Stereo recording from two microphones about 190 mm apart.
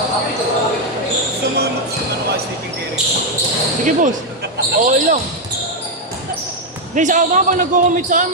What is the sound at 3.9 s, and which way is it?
Basketball bounce, 45° right (ahead or behind).